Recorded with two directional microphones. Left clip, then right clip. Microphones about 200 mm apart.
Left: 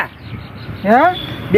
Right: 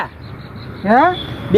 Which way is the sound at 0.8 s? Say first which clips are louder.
Left 1 dB; 35° left (ahead or behind).